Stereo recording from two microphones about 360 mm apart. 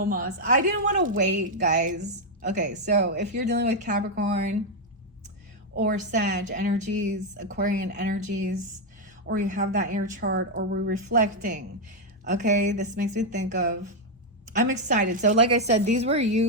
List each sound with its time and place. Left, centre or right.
0.0 s a woman's voice: right
5.7 s a woman's voice: right